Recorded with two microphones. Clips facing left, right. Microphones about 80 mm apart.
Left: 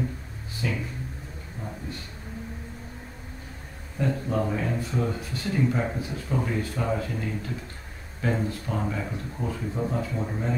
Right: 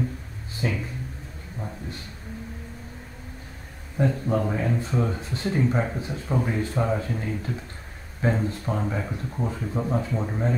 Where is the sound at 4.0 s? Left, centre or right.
Right.